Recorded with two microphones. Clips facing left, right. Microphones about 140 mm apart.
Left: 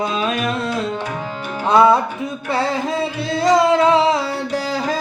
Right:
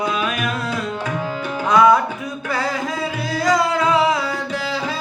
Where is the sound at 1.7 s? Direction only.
30° left (ahead or behind).